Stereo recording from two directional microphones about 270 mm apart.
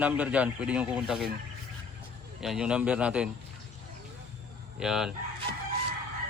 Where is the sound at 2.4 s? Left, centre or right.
Centre.